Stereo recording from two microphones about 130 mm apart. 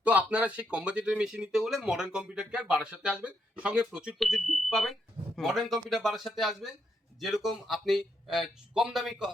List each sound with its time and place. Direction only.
0.0 s speech: 10° right (ahead or behind)